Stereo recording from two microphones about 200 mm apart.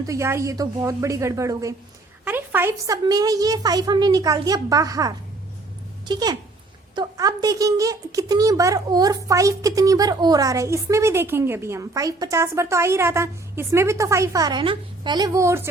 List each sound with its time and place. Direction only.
0.0 s a woman's voice: 15° right (ahead or behind)